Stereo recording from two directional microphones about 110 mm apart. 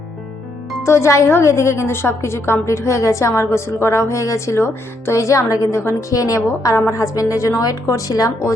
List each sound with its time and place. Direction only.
0.9 s a woman's voice: 25° left (ahead or behind)